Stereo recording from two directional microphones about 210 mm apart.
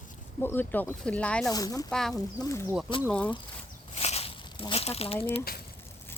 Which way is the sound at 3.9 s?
30° left (ahead or behind).